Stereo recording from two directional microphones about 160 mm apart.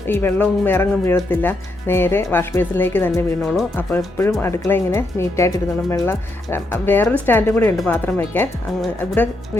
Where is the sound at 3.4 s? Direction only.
Centre (ahead or behind).